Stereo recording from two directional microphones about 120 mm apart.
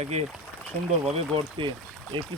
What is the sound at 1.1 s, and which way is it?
Speech, 45° right (ahead or behind).